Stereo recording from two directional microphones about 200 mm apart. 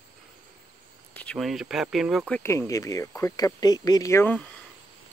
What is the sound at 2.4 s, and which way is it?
Speech, 15° left (ahead or behind).